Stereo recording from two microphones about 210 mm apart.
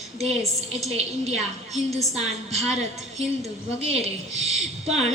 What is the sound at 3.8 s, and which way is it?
A woman's voice, 30° right (ahead or behind).